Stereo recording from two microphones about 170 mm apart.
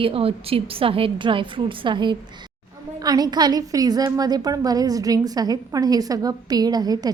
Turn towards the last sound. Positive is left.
turn(degrees=-25)  # may be behind; listen again after turning